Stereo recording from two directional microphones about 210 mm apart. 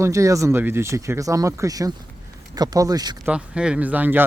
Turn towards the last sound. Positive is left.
turn(degrees=-10)  # may be behind; listen again after turning